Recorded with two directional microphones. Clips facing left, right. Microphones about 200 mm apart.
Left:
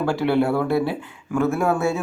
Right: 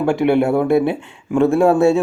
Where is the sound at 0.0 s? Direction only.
20° right (ahead or behind).